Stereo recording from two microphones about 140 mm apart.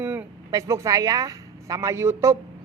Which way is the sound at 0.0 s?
10° right (ahead or behind).